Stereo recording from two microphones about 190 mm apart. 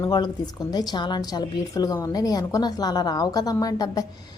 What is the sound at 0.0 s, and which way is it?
A woman's voice, 20° left (ahead or behind).